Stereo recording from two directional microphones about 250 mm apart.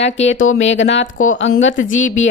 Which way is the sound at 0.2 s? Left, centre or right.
Left.